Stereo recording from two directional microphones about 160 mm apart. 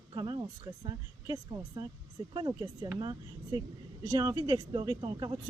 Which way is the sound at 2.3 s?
25° right (ahead or behind).